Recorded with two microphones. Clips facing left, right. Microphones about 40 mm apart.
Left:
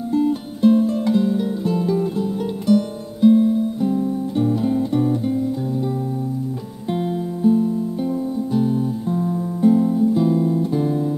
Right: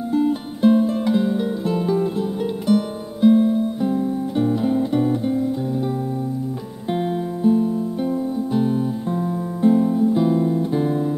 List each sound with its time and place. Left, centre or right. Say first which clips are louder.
0.1 s music: left 1 dB; centre
6.9 s music: even; centre
8.5 s guitar: left 1 dB; right